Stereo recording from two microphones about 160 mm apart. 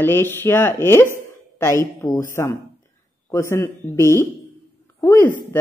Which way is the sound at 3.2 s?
15° left (ahead or behind).